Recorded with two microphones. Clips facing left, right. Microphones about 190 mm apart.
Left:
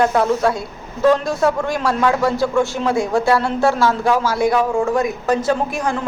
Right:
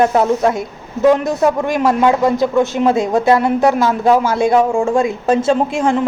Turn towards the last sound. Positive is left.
turn(degrees=-25)  # may be behind; listen again after turning